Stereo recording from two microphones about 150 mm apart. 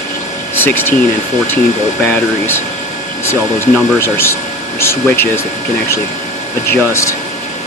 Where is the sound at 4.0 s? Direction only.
15° left (ahead or behind).